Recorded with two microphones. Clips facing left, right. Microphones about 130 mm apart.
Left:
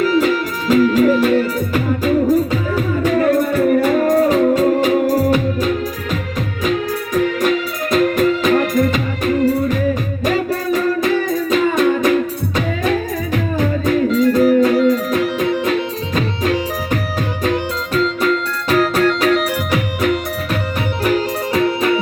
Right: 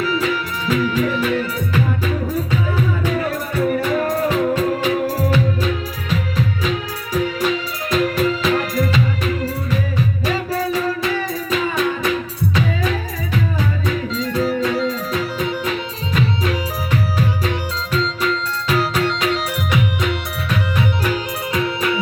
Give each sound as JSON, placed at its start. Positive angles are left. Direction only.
{"t": 0.0, "sound": "music", "side_deg": 40}
{"t": 21.5, "sound": "music", "side_deg": 35}